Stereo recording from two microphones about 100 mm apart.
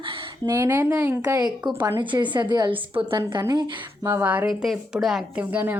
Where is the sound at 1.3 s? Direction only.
50° right (ahead or behind).